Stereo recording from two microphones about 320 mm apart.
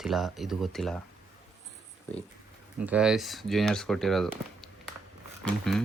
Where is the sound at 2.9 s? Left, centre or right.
Centre.